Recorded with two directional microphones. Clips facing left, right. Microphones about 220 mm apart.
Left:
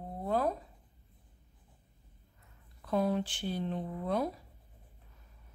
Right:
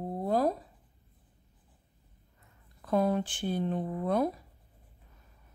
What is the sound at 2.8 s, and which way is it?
Speech, 50° right (ahead or behind).